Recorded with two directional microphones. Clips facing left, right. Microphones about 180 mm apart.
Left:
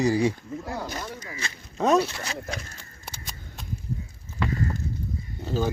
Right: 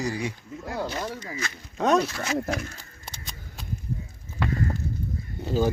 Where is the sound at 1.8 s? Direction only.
Centre (ahead or behind).